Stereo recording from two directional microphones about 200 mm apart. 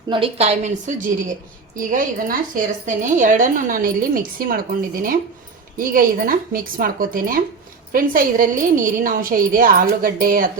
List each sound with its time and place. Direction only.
0.1 s a woman's voice: 30° right (ahead or behind)